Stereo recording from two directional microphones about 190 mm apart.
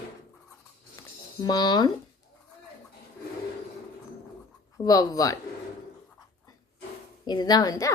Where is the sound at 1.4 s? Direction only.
20° left (ahead or behind).